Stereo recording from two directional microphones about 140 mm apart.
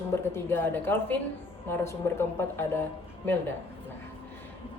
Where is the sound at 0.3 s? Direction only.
15° left (ahead or behind).